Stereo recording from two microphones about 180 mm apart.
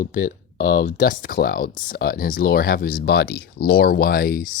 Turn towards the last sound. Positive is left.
turn(degrees=55)  # may be behind; listen again after turning